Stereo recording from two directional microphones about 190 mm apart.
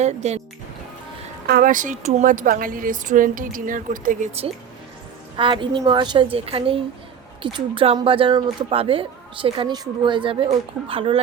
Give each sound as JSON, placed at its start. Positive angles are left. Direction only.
{"t": 0.0, "sound": "speech", "side_deg": -35}
{"t": 1.5, "sound": "a woman's voice", "side_deg": -50}
{"t": 5.4, "sound": "speech", "side_deg": -25}